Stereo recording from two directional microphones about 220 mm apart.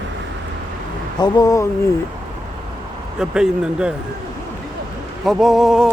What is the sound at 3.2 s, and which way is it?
Speech, 5° right (ahead or behind).